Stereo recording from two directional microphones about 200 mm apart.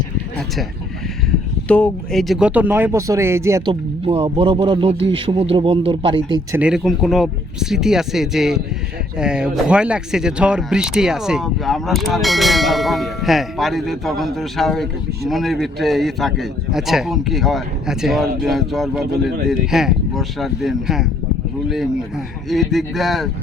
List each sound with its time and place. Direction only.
1.6 s speech: 5° left (ahead or behind); by 3.6 s 15° right (ahead or behind)
3.7 s speech: 30° right (ahead or behind)
6.6 s speech: 5° right (ahead or behind)
22.4 s speech: centre (ahead or behind)